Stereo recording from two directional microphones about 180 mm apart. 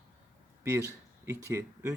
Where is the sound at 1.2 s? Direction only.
15° right (ahead or behind).